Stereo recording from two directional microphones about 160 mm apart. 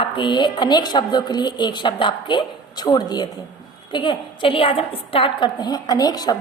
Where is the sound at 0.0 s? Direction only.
30° left (ahead or behind).